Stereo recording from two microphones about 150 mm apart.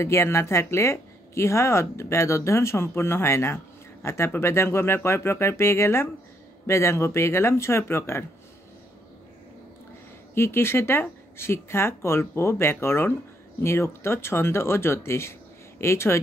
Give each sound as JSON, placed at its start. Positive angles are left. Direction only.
{"t": 0.0, "sound": "speech", "side_deg": 20}
{"t": 10.3, "sound": "speech", "side_deg": 15}